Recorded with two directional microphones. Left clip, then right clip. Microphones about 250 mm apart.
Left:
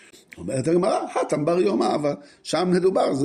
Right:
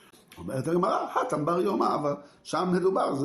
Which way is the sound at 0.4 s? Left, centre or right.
Left.